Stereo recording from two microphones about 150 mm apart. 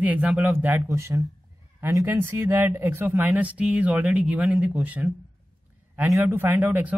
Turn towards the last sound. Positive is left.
turn(degrees=-10)  # may be behind; listen again after turning